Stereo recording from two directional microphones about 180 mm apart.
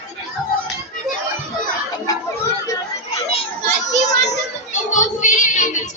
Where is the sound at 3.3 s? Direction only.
35° left (ahead or behind).